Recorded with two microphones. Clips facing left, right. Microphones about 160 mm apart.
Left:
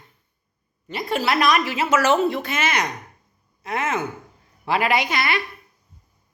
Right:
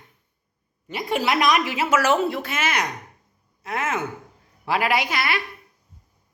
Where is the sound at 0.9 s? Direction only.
15° right (ahead or behind).